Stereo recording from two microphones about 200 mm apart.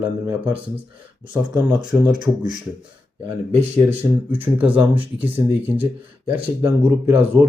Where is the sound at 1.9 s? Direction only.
5° right (ahead or behind).